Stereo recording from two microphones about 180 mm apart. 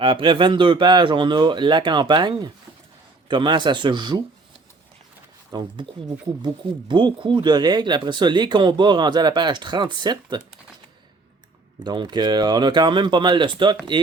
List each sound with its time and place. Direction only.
0.0 s speech: 25° right (ahead or behind)
5.5 s speech: 25° right (ahead or behind)
11.8 s speech: 25° right (ahead or behind)